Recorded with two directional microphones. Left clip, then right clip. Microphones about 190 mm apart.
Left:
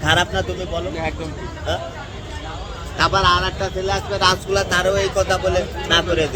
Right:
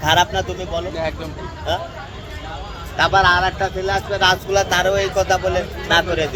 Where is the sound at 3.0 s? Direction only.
15° left (ahead or behind).